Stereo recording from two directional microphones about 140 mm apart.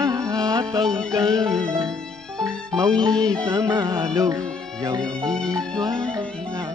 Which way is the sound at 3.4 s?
25° right (ahead or behind).